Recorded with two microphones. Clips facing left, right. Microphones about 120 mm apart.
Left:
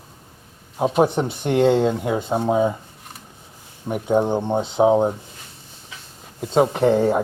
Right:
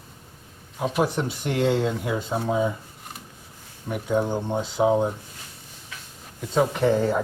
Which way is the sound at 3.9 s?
25° left (ahead or behind).